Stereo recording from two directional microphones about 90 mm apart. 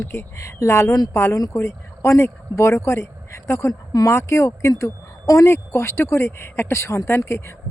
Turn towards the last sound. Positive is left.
turn(degrees=30)  # may be behind; listen again after turning